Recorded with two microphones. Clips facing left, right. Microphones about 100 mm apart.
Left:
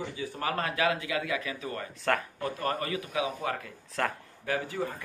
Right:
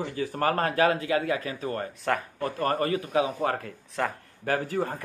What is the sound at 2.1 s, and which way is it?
Speech, 5° right (ahead or behind).